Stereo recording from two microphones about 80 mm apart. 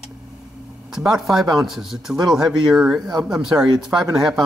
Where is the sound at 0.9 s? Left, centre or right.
Centre.